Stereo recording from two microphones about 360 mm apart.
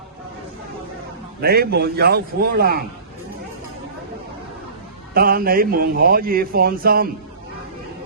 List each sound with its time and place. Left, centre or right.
1.4 s a man's voice: right
5.1 s a man's voice: right